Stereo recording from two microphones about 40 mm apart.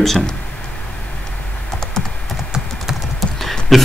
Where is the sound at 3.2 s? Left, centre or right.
Centre.